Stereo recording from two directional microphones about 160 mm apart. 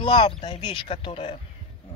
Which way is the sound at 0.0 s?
30° left (ahead or behind).